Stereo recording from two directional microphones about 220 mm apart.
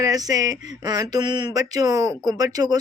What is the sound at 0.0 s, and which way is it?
Speech, 15° right (ahead or behind).